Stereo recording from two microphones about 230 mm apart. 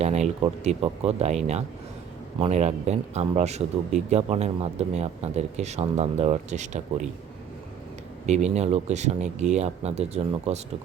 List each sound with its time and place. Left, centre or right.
0.0 s a man's voice: right
2.4 s a man's voice: right
8.3 s a man's voice: right